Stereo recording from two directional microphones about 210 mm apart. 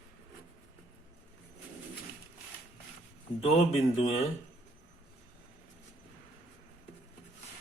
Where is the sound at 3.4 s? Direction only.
30° left (ahead or behind).